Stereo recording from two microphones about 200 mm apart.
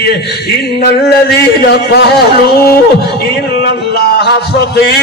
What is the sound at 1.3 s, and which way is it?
A man's voice, 55° left (ahead or behind).